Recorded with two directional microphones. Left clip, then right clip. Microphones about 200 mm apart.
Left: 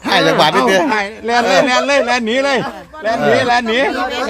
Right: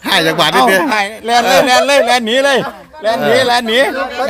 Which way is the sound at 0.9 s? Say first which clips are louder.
Right 2 dB; 50° right (ahead or behind).